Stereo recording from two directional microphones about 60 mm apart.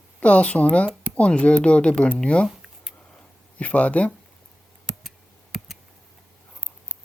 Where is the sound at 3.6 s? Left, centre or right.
Left.